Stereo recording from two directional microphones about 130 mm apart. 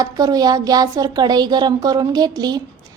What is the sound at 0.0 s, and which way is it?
Child singing, 30° right (ahead or behind).